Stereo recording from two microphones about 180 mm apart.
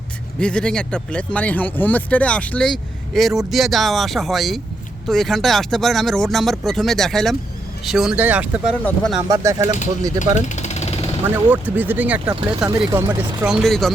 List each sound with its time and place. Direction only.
0.3 s speech: 5° left (ahead or behind)
9.3 s speech: 15° right (ahead or behind)
10.3 s a sound: 40° left (ahead or behind)
11.4 s speech: 10° right (ahead or behind)
12.3 s speech: 25° right (ahead or behind)
12.9 s speech: 10° right (ahead or behind)